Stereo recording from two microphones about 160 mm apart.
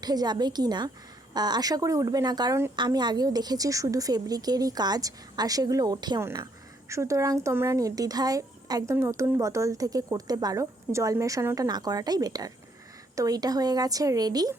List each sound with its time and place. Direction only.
0.0 s speech: 25° right (ahead or behind)